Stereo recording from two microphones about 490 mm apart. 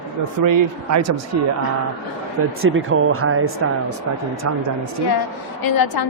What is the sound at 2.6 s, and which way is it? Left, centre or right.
Speech, right.